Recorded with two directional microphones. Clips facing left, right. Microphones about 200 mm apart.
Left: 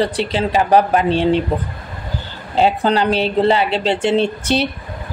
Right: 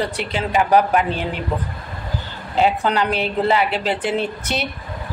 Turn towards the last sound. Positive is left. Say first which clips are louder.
# left 6 dB
turn(degrees=30)  # may be behind; listen again after turning